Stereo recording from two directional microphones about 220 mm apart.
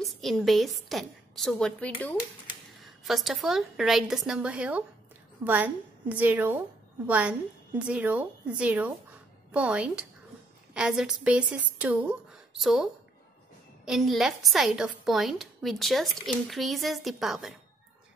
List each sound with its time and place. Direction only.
0.0 s a woman's voice: centre (ahead or behind)